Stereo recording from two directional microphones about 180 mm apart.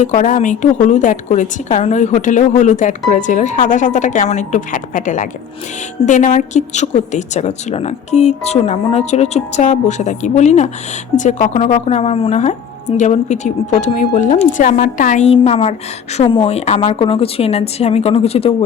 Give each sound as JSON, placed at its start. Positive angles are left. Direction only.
{"t": 0.0, "sound": "a woman's voice", "side_deg": 45}